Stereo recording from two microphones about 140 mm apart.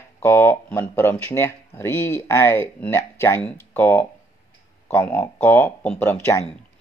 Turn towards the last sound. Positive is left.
turn(degrees=15)  # may be behind; listen again after turning